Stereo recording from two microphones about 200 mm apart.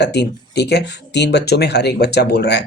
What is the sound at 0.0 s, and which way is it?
Speech, 55° left (ahead or behind).